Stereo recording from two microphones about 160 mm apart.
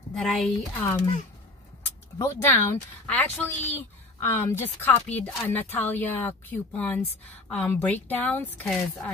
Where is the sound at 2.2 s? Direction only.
15° left (ahead or behind).